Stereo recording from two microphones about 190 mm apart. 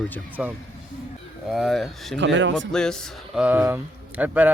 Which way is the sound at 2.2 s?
75° right (ahead or behind).